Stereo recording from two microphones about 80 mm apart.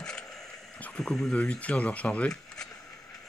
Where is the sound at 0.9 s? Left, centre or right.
Centre.